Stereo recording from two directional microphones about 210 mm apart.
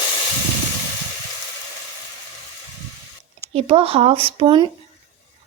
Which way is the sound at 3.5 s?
30° right (ahead or behind).